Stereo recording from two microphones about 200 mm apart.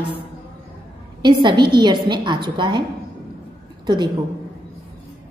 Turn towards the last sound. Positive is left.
turn(degrees=-20)  # may be behind; listen again after turning